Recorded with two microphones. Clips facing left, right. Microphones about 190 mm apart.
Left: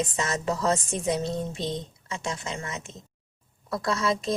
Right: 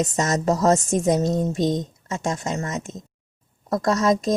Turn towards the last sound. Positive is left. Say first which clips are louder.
# right 7 dB
turn(degrees=-45)  # may be behind; listen again after turning